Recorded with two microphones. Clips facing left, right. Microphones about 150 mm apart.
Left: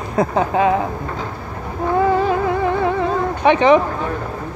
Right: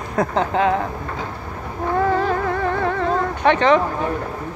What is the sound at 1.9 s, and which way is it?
Music, 10° left (ahead or behind).